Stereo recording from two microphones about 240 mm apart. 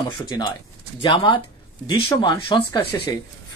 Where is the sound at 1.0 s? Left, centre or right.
Centre.